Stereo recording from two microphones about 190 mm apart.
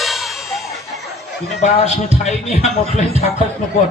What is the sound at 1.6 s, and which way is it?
A man's voice, 35° left (ahead or behind).